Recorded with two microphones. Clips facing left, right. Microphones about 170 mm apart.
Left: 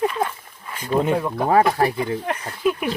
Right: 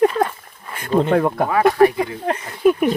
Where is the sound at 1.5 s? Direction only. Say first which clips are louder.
Right 3 dB; 35° left (ahead or behind).